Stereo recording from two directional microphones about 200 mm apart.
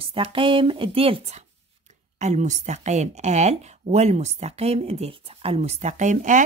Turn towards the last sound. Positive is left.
turn(degrees=-40)  # may be behind; listen again after turning